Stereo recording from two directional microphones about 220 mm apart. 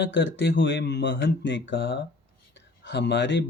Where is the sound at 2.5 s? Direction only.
55° left (ahead or behind).